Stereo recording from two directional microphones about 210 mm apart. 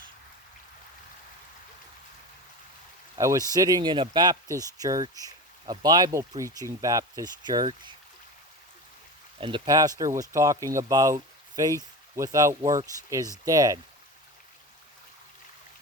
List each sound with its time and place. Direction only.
3.2 s speech: 15° right (ahead or behind)
9.4 s speech: 20° right (ahead or behind)